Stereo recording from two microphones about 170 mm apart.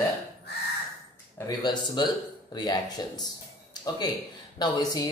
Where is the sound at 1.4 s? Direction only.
25° left (ahead or behind).